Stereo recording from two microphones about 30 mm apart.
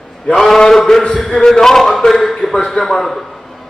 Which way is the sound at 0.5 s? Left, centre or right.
Centre.